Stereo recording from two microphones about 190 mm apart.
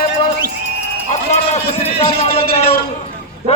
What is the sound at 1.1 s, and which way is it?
A man's voice, 35° left (ahead or behind).